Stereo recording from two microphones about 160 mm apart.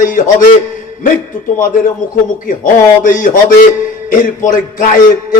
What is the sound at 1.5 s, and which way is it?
Speech, 55° left (ahead or behind).